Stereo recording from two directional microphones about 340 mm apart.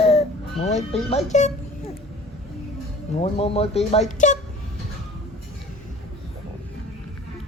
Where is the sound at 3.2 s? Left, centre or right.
Centre.